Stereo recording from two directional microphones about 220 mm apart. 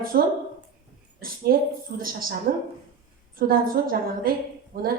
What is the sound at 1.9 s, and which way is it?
A woman's voice, 40° right (ahead or behind).